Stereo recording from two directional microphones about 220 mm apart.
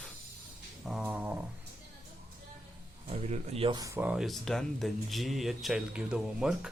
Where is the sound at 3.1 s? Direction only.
30° right (ahead or behind); by 6.7 s 5° right (ahead or behind).